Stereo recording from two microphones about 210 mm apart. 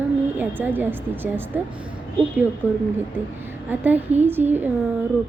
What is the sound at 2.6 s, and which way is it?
A woman's voice, 10° right (ahead or behind).